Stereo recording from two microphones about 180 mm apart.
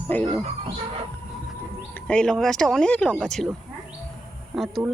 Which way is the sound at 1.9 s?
5° left (ahead or behind).